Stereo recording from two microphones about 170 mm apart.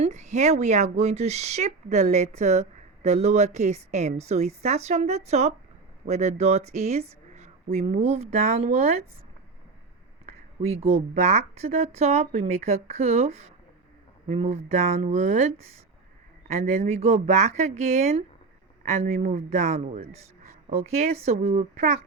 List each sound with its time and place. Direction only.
0.0 s speech: 45° right (ahead or behind)
10.6 s a man's voice: 40° right (ahead or behind)